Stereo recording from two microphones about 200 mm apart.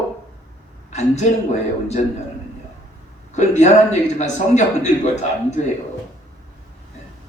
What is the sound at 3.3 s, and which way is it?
Speech, 35° left (ahead or behind).